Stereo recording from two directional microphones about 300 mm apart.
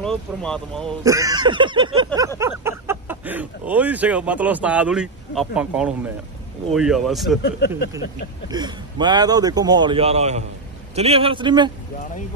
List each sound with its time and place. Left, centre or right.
0.0 s speech: centre
1.0 s speech: centre
8.5 s speech: centre